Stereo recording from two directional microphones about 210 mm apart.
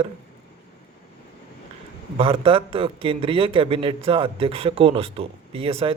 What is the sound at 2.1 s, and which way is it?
A man's voice, 25° right (ahead or behind).